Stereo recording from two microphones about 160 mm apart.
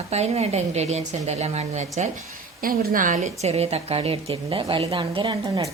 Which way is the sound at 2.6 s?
60° right (ahead or behind).